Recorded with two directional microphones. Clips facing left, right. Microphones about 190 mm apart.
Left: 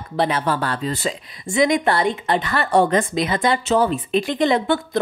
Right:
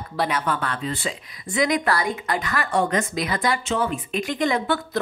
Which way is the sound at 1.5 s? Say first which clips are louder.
Left 4 dB; 25° left (ahead or behind).